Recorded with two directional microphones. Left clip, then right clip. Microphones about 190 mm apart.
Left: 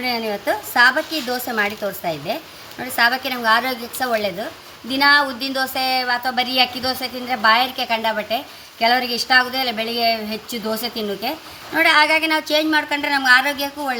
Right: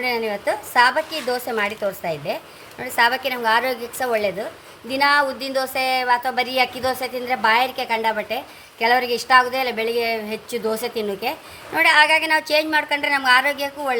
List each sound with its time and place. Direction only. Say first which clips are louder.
0.0 s a woman's voice: even; 45° right (ahead or behind)